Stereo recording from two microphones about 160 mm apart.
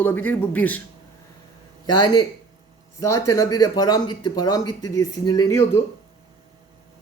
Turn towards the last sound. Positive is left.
turn(degrees=20)  # may be behind; listen again after turning